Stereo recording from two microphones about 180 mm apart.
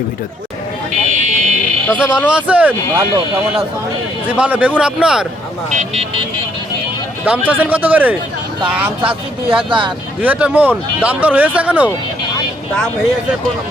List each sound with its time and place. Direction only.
1.2 s vehicle: 40° right (ahead or behind)
1.9 s speech: 5° right (ahead or behind)
4.3 s speech: 10° right (ahead or behind)
5.7 s speech: 35° right (ahead or behind)
7.3 s speech: 10° right (ahead or behind)
9.6 s speech: 25° right (ahead or behind)
10.2 s speech: 10° right (ahead or behind)